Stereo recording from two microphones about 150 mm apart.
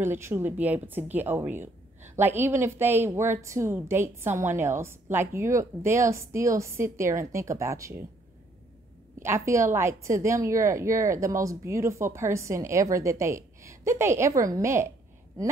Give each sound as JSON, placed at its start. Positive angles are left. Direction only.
{"t": 0.0, "sound": "a woman's voice", "side_deg": -15}
{"t": 9.2, "sound": "a woman's voice", "side_deg": -20}